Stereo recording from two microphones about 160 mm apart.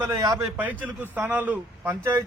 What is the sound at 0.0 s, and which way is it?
A man's voice, 20° right (ahead or behind).